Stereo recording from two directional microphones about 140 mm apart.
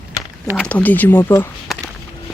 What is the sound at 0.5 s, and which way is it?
Speech, 10° left (ahead or behind).